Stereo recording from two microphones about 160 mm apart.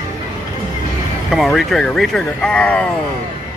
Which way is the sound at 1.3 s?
Centre (ahead or behind).